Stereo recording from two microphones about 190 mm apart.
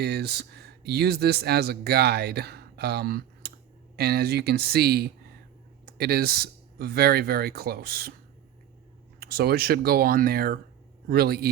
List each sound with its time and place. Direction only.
0.0 s speech: 60° right (ahead or behind)
9.2 s speech: 55° right (ahead or behind)